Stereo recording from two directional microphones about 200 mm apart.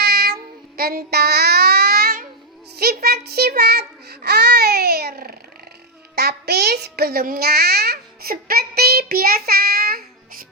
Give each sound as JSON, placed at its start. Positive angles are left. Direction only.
{"t": 0.0, "sound": "child singing", "side_deg": -55}
{"t": 2.7, "sound": "a child's voice", "side_deg": -50}